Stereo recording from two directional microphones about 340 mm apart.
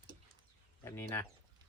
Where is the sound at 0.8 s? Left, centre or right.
Centre.